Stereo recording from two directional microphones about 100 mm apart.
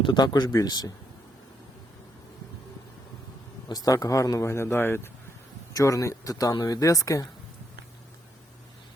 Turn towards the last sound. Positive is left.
turn(degrees=35)  # may be behind; listen again after turning